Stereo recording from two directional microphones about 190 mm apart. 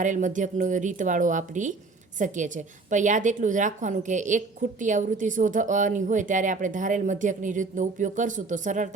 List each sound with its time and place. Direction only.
0.0 s a woman's voice: 40° right (ahead or behind)